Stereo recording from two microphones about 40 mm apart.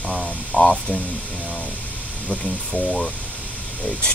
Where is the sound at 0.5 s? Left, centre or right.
Left.